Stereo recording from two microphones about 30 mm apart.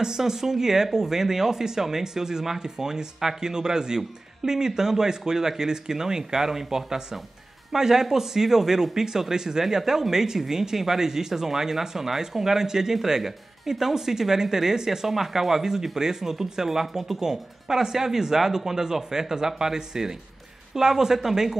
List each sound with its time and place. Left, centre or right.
0.0 s speech: centre